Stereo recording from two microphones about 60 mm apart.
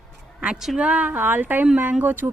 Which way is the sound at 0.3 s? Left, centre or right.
Centre.